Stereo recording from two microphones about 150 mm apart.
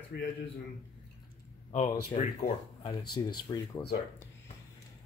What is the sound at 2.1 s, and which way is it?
Speech, 40° left (ahead or behind).